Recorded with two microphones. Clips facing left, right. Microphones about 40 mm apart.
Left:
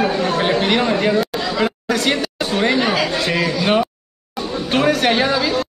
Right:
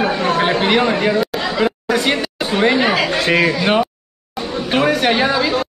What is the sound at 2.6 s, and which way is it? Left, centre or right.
Chatter, centre.